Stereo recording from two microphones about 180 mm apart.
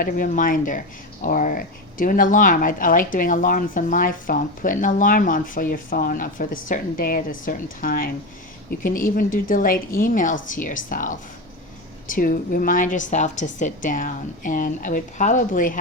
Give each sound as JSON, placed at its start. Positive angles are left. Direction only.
{"t": 0.0, "sound": "speech", "side_deg": 50}